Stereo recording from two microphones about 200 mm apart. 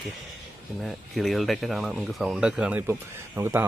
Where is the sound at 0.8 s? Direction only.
Centre (ahead or behind).